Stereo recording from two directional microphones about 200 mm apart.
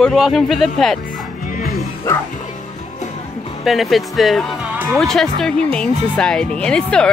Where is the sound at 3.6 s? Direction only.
Centre (ahead or behind).